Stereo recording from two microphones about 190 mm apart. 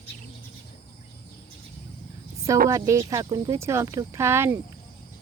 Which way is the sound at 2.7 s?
15° right (ahead or behind).